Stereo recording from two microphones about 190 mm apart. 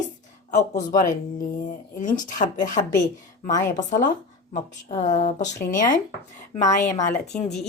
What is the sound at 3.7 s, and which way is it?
Speech, 40° left (ahead or behind).